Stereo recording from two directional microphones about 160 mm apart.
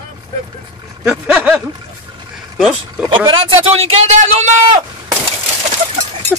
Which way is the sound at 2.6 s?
Centre (ahead or behind).